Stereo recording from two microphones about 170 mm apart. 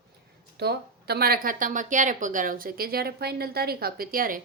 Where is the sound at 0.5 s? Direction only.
70° right (ahead or behind).